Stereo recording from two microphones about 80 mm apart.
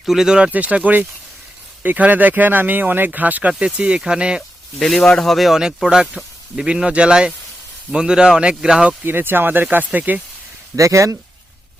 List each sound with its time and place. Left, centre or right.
0.0 s speech: centre
4.8 s speech: centre
9.0 s speech: right
10.8 s speech: right